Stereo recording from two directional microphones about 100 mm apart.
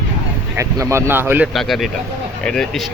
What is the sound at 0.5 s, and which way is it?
Speech, 30° right (ahead or behind).